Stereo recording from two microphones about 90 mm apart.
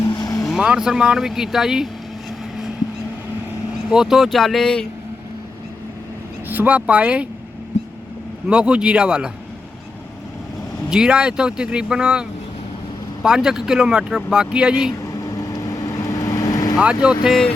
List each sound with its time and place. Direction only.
0.1 s vehicle: 45° left (ahead or behind)
0.4 s speech: 5° right (ahead or behind)
3.8 s speech: 5° right (ahead or behind)
6.5 s speech: 20° right (ahead or behind)
8.4 s speech: 10° right (ahead or behind)
10.8 s speech: 10° right (ahead or behind)
13.2 s speech: 5° right (ahead or behind)
15.0 s vehicle: 35° left (ahead or behind)
16.8 s speech: 10° right (ahead or behind)